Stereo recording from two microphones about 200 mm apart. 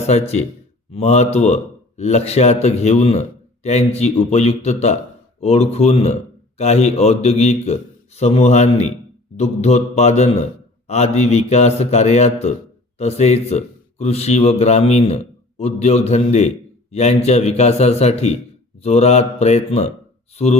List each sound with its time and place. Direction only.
0.0 s speech: 30° left (ahead or behind)